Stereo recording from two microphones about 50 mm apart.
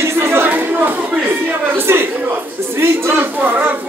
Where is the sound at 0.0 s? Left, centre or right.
Right.